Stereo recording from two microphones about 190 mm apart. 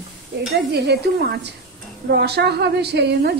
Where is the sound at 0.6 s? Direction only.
60° right (ahead or behind).